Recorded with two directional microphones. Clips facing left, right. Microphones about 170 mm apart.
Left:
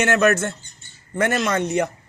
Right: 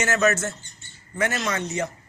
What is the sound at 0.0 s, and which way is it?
Speech, 60° left (ahead or behind).